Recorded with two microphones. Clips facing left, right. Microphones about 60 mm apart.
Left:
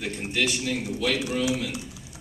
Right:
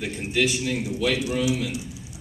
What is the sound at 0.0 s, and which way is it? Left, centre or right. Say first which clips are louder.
Speech: right 3 dB; centre.